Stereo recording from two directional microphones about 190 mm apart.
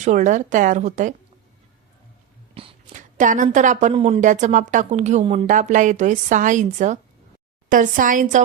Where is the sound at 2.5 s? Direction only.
40° right (ahead or behind).